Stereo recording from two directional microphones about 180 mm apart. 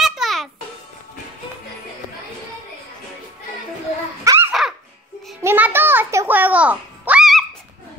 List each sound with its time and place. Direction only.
0.0 s music: centre (ahead or behind)
4.2 s babbling: 15° right (ahead or behind)
4.5 s baby laughter: 5° right (ahead or behind)
5.4 s a sound: 10° right (ahead or behind)